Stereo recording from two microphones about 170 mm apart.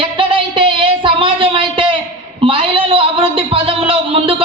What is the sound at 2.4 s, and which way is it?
A man's voice, 30° right (ahead or behind).